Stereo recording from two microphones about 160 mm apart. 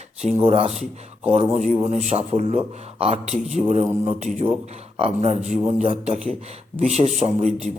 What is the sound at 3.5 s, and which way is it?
Speech, 45° right (ahead or behind).